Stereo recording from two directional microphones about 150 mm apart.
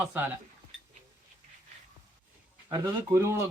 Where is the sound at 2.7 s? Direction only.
20° right (ahead or behind).